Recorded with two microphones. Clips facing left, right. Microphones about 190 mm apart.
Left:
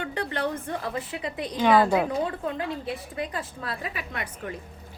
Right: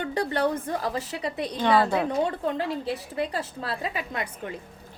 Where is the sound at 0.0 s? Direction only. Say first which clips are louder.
Right 4 dB; 35° right (ahead or behind).